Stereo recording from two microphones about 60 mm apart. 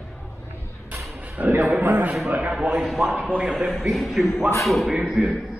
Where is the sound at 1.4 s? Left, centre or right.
Right.